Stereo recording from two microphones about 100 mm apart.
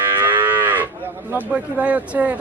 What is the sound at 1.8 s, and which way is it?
Speech, 15° right (ahead or behind).